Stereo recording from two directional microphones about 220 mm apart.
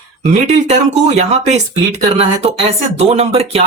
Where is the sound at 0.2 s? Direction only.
30° right (ahead or behind).